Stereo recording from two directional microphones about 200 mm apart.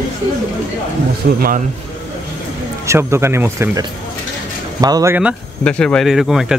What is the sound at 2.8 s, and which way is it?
Speech, 15° right (ahead or behind).